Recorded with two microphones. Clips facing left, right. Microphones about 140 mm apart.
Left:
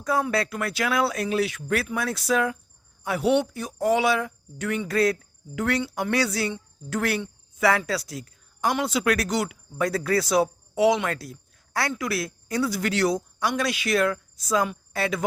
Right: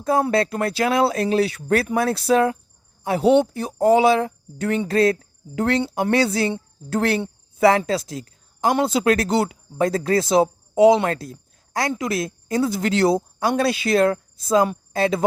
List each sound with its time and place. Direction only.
0.3 s a woman's voice: 30° right (ahead or behind)